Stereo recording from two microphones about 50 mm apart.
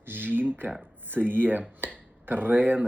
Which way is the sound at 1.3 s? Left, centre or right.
Right.